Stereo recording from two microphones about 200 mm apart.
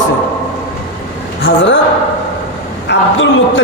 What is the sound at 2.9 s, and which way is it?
Speech, 70° left (ahead or behind).